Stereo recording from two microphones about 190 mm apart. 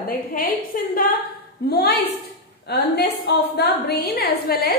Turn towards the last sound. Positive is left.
turn(degrees=55)  # may be behind; listen again after turning